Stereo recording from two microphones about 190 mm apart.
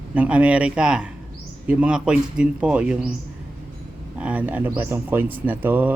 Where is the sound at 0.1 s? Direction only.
5° right (ahead or behind).